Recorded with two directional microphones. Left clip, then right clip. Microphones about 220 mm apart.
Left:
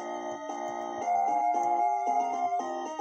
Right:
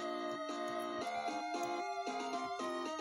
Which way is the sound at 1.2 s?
25° right (ahead or behind).